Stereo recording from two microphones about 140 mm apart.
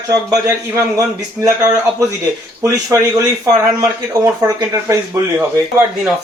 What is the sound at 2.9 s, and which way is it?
Speech, 20° right (ahead or behind).